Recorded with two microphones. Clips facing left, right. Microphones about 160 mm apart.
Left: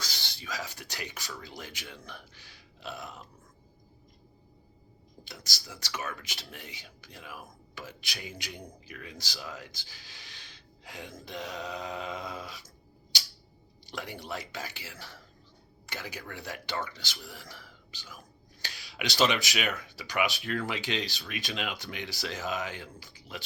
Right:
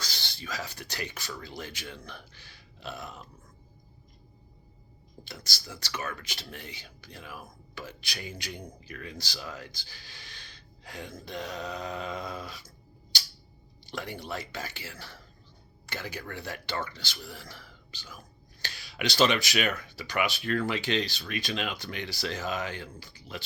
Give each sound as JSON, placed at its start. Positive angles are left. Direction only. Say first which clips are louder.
{"t": 0.0, "sound": "speech", "louder": "right 1 dB", "side_deg": 15}
{"t": 5.3, "sound": "speech", "louder": "right 2 dB", "side_deg": 15}
{"t": 13.8, "sound": "speech", "louder": "right 2 dB", "side_deg": 15}
{"t": 18.6, "sound": "speech", "louder": "right 4 dB", "side_deg": 15}